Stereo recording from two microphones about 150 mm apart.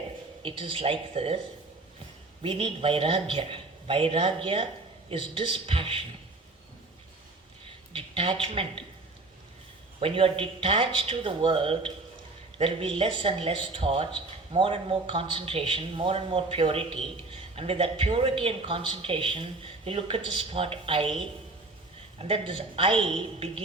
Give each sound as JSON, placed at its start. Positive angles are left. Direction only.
{"t": 0.4, "sound": "a man's voice", "side_deg": -40}
{"t": 2.4, "sound": "a man's voice", "side_deg": -40}
{"t": 7.9, "sound": "a man's voice", "side_deg": -35}
{"t": 10.0, "sound": "a man's voice", "side_deg": -40}
{"t": 22.2, "sound": "a man's voice", "side_deg": -40}